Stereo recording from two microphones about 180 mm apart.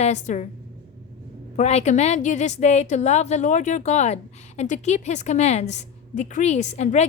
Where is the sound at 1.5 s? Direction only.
40° left (ahead or behind).